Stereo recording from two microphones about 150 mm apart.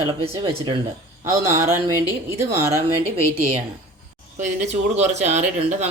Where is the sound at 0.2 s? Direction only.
30° right (ahead or behind).